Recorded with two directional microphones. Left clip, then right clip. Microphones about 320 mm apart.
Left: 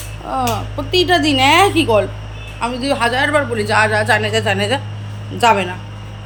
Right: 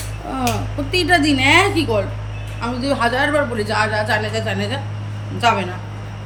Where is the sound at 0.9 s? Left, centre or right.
Centre.